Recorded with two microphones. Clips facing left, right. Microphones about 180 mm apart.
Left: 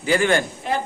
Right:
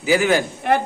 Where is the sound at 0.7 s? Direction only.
60° right (ahead or behind).